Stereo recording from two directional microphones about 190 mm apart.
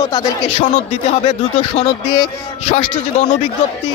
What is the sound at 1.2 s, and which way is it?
A man's voice, 25° left (ahead or behind).